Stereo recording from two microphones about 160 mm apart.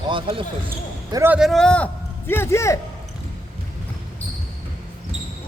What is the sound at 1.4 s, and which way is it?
A man's voice, centre (ahead or behind).